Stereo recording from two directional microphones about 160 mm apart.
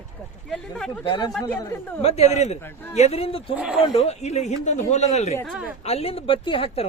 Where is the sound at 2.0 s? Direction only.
40° left (ahead or behind).